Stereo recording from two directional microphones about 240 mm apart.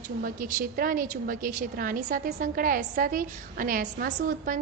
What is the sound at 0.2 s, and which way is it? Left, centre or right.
A woman's voice, right.